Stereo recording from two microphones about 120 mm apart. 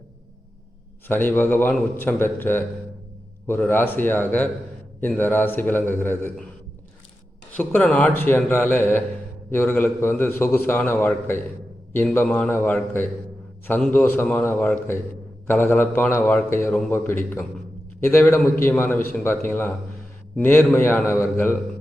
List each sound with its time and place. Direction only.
1.0 s a man's voice: 15° left (ahead or behind)
7.5 s a man's voice: 15° left (ahead or behind)